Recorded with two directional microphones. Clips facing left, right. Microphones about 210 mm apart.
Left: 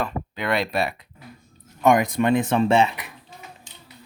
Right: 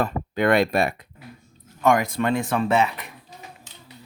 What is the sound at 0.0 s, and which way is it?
Speech, 50° right (ahead or behind).